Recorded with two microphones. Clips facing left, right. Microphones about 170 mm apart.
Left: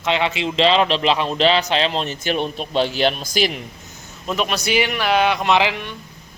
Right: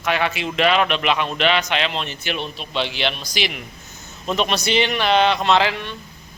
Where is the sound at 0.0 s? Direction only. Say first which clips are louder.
Left 2 dB; 20° left (ahead or behind); by 3.6 s 45° left (ahead or behind).